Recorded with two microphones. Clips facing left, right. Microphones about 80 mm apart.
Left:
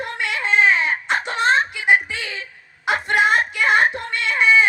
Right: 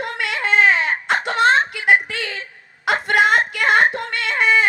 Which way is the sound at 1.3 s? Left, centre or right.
Right.